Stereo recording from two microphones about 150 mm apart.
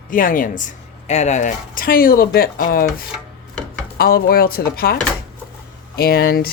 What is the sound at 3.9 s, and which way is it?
Speech, 80° left.